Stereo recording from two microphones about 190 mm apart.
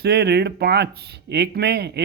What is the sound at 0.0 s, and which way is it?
Speech, 60° right (ahead or behind).